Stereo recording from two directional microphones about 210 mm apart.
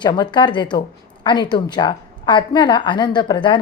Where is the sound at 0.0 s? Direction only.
20° left (ahead or behind).